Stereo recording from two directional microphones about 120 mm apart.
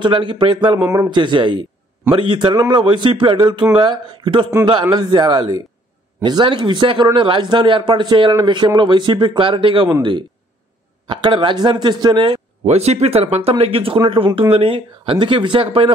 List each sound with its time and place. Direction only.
0.0 s speech: 45° right (ahead or behind)
0.8 s speech: 25° right (ahead or behind)
1.1 s speech: 40° right (ahead or behind)
11.1 s speech: 40° right (ahead or behind)
12.6 s speech: 65° right (ahead or behind)